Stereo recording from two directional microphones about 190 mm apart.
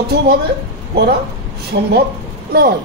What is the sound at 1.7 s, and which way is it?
Speech, 55° right (ahead or behind).